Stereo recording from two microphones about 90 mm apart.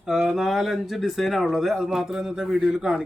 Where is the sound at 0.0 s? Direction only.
5° right (ahead or behind).